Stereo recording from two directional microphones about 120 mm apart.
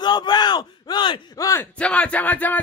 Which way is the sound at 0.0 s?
35° left (ahead or behind).